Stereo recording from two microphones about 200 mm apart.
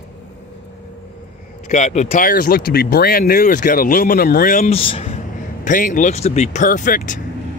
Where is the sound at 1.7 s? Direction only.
35° left (ahead or behind).